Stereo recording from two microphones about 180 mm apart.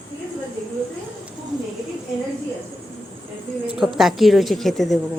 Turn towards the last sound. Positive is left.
turn(degrees=0)  # may be behind; listen again after turning